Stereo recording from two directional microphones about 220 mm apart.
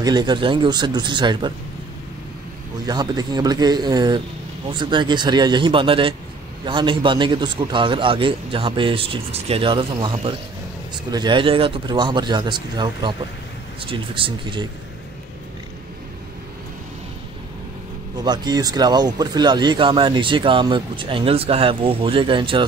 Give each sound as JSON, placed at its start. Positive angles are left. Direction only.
{"t": 0.0, "sound": "speech", "side_deg": -20}
{"t": 2.9, "sound": "speech", "side_deg": -20}
{"t": 18.2, "sound": "speech", "side_deg": -20}